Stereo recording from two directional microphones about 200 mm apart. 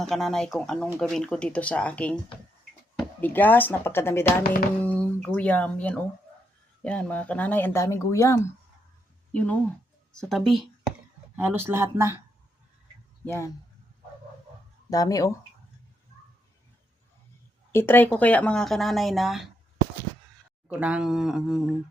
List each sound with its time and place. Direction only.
0.0 s speech: centre (ahead or behind)
11.4 s speech: 10° right (ahead or behind)
13.2 s speech: 15° left (ahead or behind)
14.8 s speech: 20° left (ahead or behind)
17.7 s speech: 10° left (ahead or behind)
20.7 s speech: 5° right (ahead or behind)